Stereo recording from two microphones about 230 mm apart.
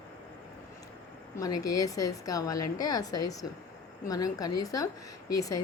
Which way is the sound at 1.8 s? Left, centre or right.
Centre.